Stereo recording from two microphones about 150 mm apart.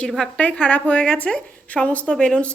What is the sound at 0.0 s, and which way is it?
A woman's voice, 5° left (ahead or behind).